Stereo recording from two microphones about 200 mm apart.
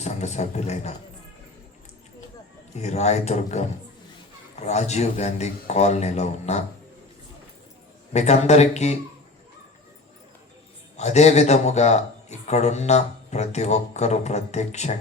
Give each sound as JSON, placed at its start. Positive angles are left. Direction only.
{"t": 0.0, "sound": "speech", "side_deg": 35}
{"t": 2.7, "sound": "a man's voice", "side_deg": 35}
{"t": 8.1, "sound": "a man's voice", "side_deg": 35}
{"t": 10.9, "sound": "a man's voice", "side_deg": 35}